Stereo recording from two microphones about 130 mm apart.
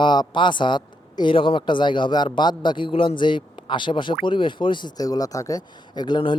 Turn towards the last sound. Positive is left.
turn(degrees=35)  # may be behind; listen again after turning